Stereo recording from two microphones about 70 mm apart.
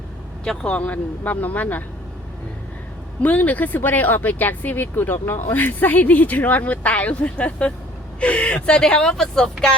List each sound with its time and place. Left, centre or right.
0.4 s speech: centre
3.2 s speech: left; by 9.7 s centre